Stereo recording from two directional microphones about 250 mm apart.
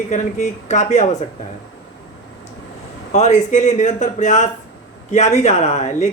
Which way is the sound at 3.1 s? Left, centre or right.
Left.